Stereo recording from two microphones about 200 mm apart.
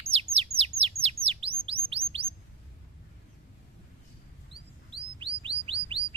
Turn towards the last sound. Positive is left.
turn(degrees=-30)  # may be behind; listen again after turning